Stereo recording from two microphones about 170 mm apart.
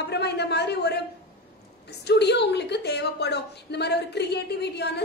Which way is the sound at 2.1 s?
80° left.